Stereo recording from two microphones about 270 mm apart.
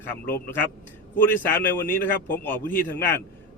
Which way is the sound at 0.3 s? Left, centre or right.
Left.